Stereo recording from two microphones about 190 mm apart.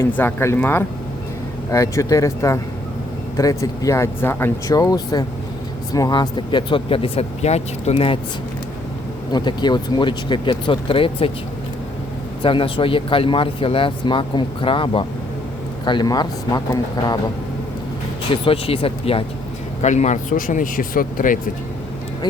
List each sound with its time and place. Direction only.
0.0 s speech: 10° left (ahead or behind); by 8.2 s 30° left (ahead or behind)
9.3 s speech: 25° left (ahead or behind)
12.4 s speech: 25° left (ahead or behind)
18.4 s speech: 30° left (ahead or behind); by 21.3 s 45° left (ahead or behind)